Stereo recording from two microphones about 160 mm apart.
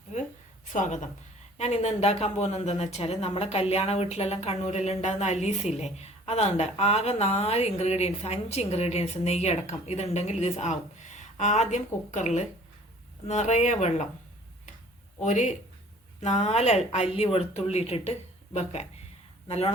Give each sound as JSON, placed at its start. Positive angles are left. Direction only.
{"t": 0.1, "sound": "a sound", "side_deg": 45}
{"t": 0.7, "sound": "speech", "side_deg": 50}
{"t": 15.2, "sound": "speech", "side_deg": 50}